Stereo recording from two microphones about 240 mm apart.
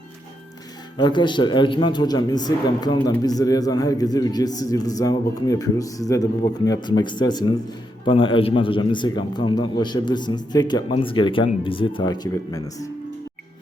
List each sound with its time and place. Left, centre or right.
0.9 s a man's voice: centre